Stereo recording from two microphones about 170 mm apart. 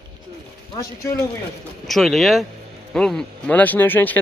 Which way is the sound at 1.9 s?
Centre (ahead or behind).